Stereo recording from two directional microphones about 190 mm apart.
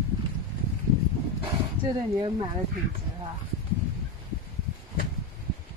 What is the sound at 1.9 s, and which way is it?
Speech, 20° right (ahead or behind).